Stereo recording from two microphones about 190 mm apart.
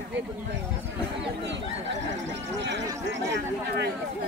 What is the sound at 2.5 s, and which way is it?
Speech, 70° right (ahead or behind).